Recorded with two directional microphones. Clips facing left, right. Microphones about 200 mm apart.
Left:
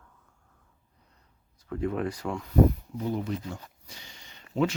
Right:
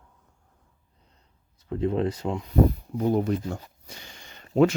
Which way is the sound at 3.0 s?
50° right (ahead or behind).